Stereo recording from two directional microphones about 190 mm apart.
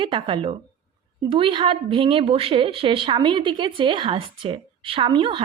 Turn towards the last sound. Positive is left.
turn(degrees=-25)  # may be behind; listen again after turning